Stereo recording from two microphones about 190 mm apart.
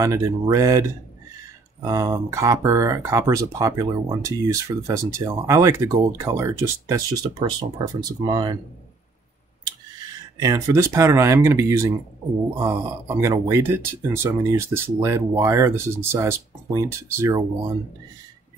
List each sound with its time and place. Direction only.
0.0 s speech: 15° right (ahead or behind)
10.4 s speech: 15° right (ahead or behind)